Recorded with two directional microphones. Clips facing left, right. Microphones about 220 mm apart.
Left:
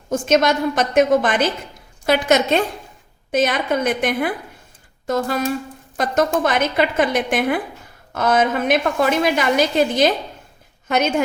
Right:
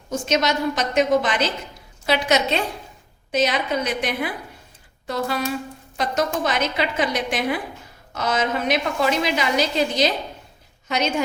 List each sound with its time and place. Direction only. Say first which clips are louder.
0.1 s a woman's voice: left 5 dB; 55° left (ahead or behind)